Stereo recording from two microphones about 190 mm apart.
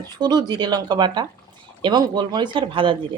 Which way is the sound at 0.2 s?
20° right (ahead or behind).